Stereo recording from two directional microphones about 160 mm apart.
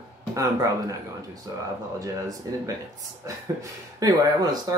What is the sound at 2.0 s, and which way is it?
Speech, 20° right (ahead or behind).